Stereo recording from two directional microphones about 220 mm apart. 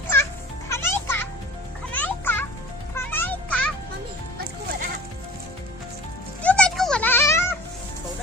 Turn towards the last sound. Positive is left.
turn(degrees=10)  # may be behind; listen again after turning